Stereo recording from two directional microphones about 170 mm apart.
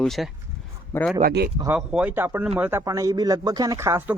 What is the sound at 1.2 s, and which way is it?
Speech, 70° right (ahead or behind).